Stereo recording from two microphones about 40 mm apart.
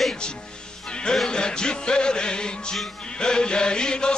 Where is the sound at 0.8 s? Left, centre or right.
Left.